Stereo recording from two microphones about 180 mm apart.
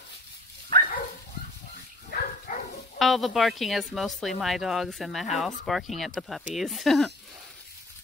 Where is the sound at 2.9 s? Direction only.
Centre (ahead or behind).